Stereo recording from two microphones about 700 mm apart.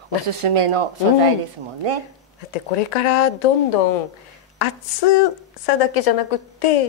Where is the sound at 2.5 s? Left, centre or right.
Left.